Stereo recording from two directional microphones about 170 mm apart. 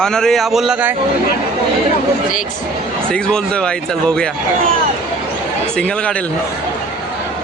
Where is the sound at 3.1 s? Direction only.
5° left (ahead or behind).